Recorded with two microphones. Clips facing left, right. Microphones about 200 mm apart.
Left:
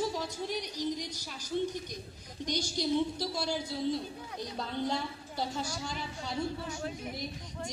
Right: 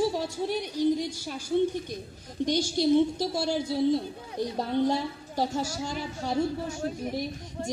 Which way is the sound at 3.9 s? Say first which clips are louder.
Right 7 dB; 50° right (ahead or behind).